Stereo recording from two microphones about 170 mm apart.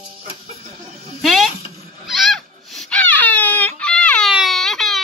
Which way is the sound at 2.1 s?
Centre (ahead or behind).